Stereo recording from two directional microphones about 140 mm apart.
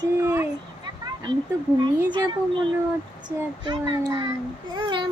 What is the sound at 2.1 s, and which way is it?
A child's voice, 30° right (ahead or behind).